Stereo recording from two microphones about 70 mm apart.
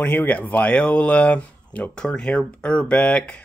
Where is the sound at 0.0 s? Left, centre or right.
Centre.